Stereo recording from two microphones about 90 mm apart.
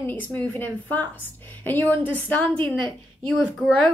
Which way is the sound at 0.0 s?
20° left (ahead or behind).